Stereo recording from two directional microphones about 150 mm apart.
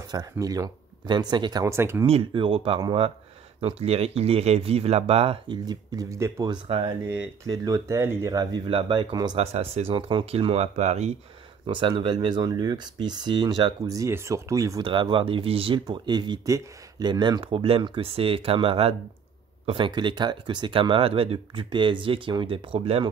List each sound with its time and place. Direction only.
0.1 s speech: 25° right (ahead or behind)
2.0 s speech: 40° right (ahead or behind); by 6.5 s 20° right (ahead or behind)
6.5 s speech: 30° right (ahead or behind)
9.4 s speech: 45° right (ahead or behind)
11.6 s speech: 35° right (ahead or behind)
14.9 s speech: 35° right (ahead or behind)